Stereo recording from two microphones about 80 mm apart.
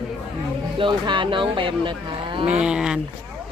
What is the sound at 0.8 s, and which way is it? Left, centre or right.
Speech, right.